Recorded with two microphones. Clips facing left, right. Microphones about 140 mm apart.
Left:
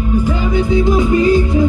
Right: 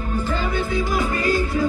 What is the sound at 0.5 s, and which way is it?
Music, 20° left (ahead or behind).